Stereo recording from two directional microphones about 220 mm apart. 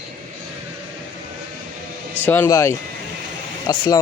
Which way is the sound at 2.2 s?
10° left (ahead or behind).